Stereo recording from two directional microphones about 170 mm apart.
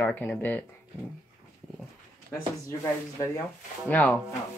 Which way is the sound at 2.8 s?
15° left (ahead or behind).